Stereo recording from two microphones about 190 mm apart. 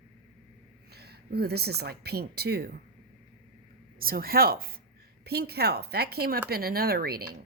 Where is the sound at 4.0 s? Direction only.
50° right (ahead or behind).